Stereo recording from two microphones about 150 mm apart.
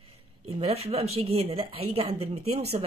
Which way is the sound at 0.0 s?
40° right (ahead or behind).